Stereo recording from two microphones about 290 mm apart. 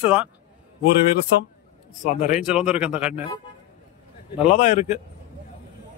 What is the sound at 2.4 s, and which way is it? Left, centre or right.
Speech, centre.